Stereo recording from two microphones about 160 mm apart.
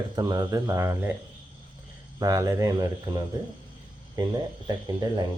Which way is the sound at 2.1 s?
20° right (ahead or behind).